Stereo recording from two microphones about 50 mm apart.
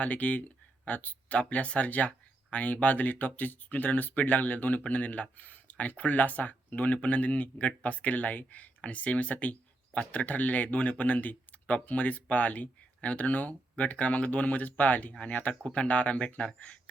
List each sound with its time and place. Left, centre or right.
0.0 s speech: left